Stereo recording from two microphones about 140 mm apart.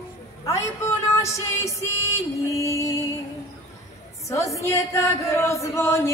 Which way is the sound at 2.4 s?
20° left (ahead or behind).